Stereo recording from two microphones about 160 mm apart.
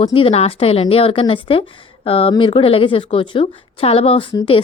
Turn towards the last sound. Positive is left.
turn(degrees=35)  # may be behind; listen again after turning